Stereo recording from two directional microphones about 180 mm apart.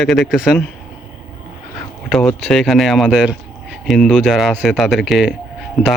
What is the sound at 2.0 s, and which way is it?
Speech, 5° left (ahead or behind).